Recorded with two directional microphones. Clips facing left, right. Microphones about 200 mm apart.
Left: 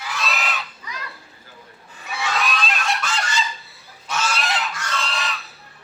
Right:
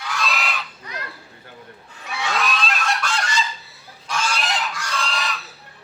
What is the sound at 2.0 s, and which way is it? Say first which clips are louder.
Goose: even; 5° left (ahead or behind).